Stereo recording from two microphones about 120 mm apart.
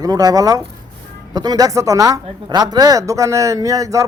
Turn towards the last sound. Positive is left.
turn(degrees=-30)  # may be behind; listen again after turning